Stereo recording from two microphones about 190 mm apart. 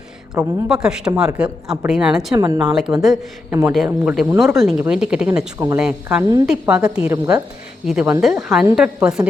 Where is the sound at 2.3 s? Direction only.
15° right (ahead or behind).